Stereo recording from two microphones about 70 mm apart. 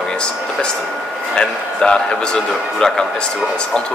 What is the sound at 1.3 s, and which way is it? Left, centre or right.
Speech, centre.